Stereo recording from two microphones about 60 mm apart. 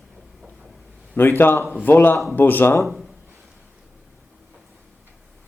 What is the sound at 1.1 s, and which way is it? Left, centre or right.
Speech, left.